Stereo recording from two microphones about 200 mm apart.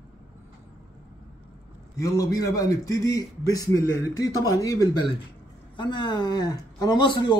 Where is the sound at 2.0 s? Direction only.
15° left (ahead or behind).